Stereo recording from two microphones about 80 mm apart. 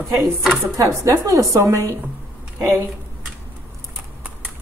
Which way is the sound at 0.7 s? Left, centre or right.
Right.